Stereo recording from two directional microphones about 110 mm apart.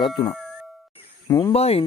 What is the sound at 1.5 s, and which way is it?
Speech, 65° left (ahead or behind).